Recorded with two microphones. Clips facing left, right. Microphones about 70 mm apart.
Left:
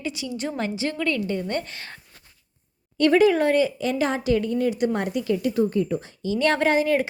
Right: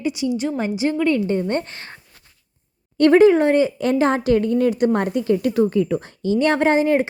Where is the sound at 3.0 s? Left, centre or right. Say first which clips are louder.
Right 5 dB; right.